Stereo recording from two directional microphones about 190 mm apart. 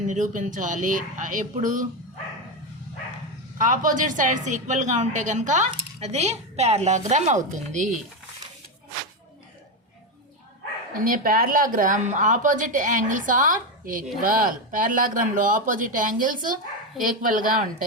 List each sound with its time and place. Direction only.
0.1 s speech: 40° right (ahead or behind)
3.6 s a woman's voice: 45° right (ahead or behind)
11.0 s speech: 45° right (ahead or behind)